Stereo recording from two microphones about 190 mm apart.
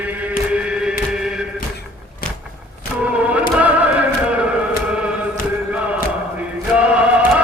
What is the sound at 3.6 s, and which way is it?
Music, 5° right (ahead or behind).